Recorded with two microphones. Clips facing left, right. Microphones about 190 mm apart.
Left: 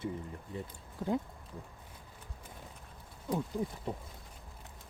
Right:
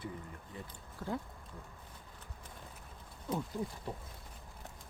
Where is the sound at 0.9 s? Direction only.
20° left (ahead or behind).